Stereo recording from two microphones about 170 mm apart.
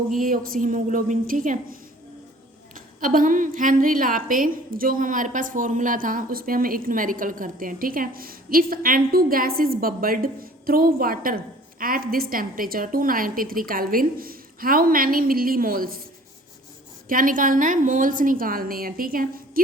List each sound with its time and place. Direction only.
0.1 s a woman's voice: 55° right (ahead or behind)
17.1 s a woman's voice: 55° right (ahead or behind)